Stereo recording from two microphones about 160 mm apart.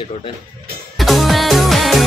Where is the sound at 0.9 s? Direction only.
Centre (ahead or behind).